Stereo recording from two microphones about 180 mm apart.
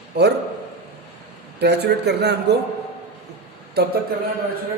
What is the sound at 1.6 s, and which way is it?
Speech, 65° right (ahead or behind).